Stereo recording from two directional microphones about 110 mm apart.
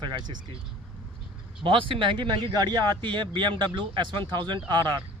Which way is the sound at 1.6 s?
50° right (ahead or behind).